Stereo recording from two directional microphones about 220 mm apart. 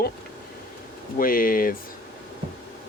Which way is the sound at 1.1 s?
40° left (ahead or behind).